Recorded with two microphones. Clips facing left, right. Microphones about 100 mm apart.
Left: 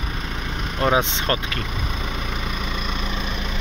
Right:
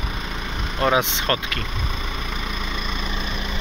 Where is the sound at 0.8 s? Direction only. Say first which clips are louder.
Even; 30° left (ahead or behind).